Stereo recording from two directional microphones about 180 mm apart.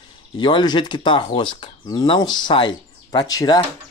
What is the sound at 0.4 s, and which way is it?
Speech, 25° left (ahead or behind).